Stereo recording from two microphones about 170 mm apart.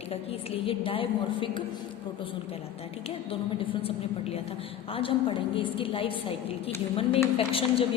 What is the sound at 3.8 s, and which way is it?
A woman's voice, 35° left (ahead or behind).